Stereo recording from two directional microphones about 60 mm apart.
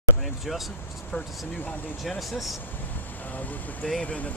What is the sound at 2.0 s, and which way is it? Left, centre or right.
Speech, centre.